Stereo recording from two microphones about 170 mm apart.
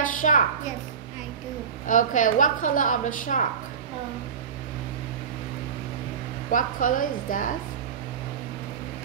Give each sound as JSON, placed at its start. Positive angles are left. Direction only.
{"t": 0.0, "sound": "a sound", "side_deg": 50}
{"t": 1.9, "sound": "a woman's voice", "side_deg": 50}
{"t": 6.5, "sound": "a woman's voice", "side_deg": 55}